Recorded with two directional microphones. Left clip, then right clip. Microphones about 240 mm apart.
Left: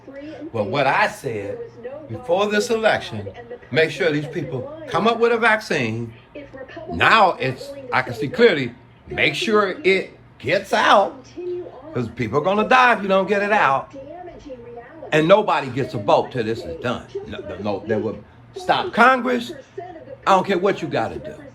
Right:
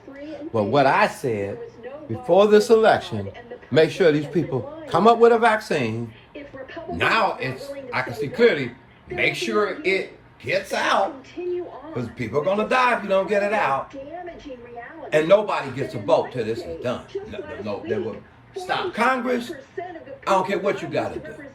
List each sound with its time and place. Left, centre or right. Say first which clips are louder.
0.7 s speech: right 2 dB; right
2.2 s a man's voice: right 4 dB; right; by 10.9 s centre
11.9 s a man's voice: left 3 dB; centre
15.1 s a man's voice: left 3 dB; centre